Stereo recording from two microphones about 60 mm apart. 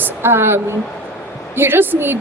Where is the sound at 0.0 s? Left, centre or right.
Right.